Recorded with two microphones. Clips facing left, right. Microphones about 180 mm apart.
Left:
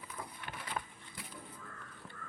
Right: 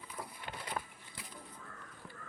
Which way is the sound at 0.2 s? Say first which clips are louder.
Right 1 dB; 5° right (ahead or behind).